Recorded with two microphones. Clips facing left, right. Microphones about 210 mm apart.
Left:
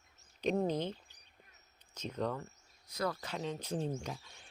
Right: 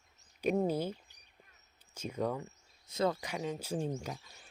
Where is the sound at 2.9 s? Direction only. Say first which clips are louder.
Right 5 dB; 25° right (ahead or behind).